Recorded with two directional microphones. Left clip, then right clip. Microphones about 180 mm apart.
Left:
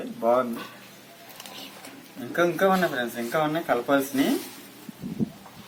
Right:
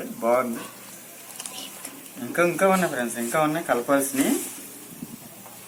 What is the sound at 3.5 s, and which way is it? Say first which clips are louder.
Speech: right 1 dB; 15° left (ahead or behind).